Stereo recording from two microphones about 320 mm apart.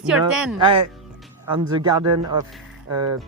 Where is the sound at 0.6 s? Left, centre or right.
Centre.